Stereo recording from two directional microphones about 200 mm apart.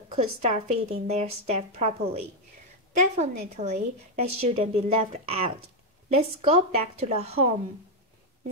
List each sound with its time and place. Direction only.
0.1 s a woman's voice: 30° right (ahead or behind)